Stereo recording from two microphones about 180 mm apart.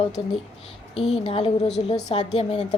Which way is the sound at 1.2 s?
30° left (ahead or behind).